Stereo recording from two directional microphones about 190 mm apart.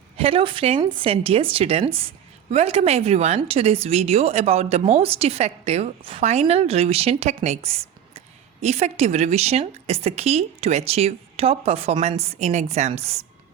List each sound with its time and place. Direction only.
0.2 s a woman's voice: 30° right (ahead or behind)